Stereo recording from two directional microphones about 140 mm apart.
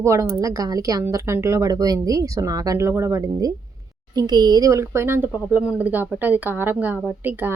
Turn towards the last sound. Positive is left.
turn(degrees=-15)  # may be behind; listen again after turning